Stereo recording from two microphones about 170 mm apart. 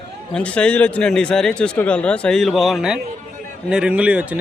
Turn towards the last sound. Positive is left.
turn(degrees=-5)  # may be behind; listen again after turning